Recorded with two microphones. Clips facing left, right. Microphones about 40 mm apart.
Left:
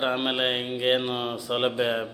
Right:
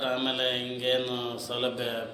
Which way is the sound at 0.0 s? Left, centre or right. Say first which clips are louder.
Left 3 dB; centre.